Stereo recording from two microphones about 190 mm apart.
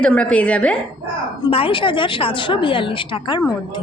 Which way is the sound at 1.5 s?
30° left (ahead or behind).